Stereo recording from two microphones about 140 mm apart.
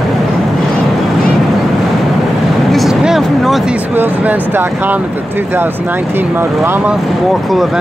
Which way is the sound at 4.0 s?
15° right (ahead or behind).